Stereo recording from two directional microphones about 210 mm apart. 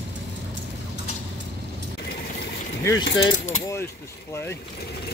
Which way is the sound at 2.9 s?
70° left (ahead or behind).